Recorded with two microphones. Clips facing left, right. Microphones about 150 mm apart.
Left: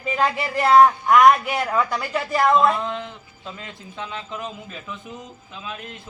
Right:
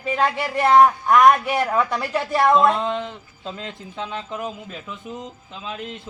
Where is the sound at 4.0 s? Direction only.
15° right (ahead or behind).